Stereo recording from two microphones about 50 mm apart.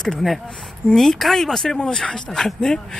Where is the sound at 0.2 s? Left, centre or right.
Centre.